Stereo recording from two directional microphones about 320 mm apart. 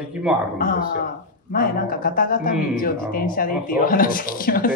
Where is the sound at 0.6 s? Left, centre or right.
Left.